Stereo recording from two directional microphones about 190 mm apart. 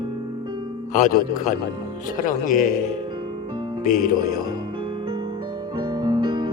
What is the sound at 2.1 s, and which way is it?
Speech, 40° left (ahead or behind).